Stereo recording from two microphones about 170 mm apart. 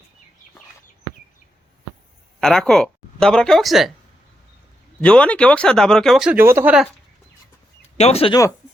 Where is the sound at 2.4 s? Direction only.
5° left (ahead or behind).